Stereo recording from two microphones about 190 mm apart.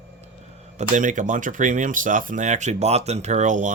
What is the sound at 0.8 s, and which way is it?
Speech, 40° right (ahead or behind).